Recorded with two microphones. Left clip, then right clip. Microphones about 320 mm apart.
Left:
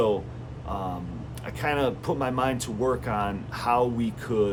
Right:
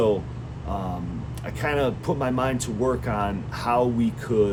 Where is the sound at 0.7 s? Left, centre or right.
Centre.